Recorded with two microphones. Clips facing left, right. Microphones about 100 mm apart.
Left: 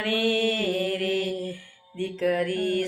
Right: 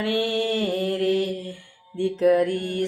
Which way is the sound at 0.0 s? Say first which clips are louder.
Even; 20° right (ahead or behind).